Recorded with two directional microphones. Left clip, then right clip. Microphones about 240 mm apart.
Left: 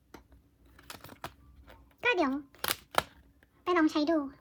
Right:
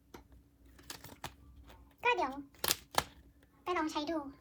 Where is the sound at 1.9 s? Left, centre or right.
Left.